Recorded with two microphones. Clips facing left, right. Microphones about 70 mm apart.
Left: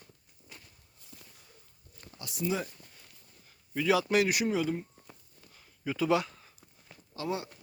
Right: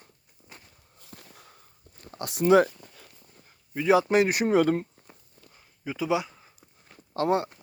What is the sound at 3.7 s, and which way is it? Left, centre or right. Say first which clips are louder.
Speech: right 5 dB; right.